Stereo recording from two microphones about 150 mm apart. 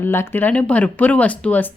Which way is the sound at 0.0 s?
15° left (ahead or behind).